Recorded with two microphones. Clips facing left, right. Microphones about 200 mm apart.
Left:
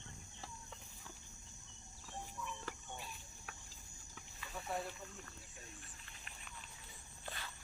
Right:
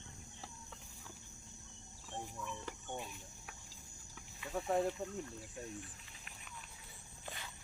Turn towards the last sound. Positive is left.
turn(degrees=-15)  # may be behind; listen again after turning